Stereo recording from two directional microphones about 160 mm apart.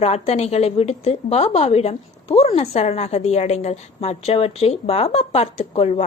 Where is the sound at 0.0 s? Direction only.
40° left (ahead or behind).